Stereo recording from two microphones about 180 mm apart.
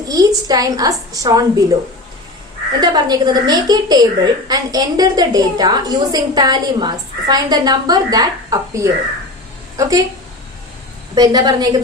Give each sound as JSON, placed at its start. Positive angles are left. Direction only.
{"t": 0.1, "sound": "a woman's voice", "side_deg": -20}
{"t": 2.8, "sound": "a woman's voice", "side_deg": -20}
{"t": 11.1, "sound": "a woman's voice", "side_deg": -20}